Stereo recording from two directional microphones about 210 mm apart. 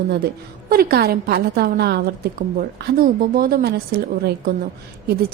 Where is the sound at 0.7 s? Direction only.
45° right (ahead or behind).